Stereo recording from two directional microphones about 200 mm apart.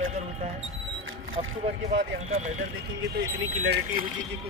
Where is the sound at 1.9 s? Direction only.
35° right (ahead or behind).